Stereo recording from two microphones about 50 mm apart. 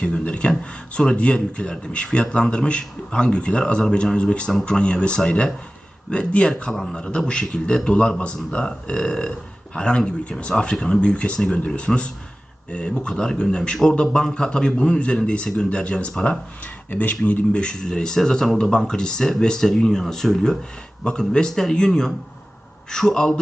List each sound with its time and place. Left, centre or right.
0.0 s speech: left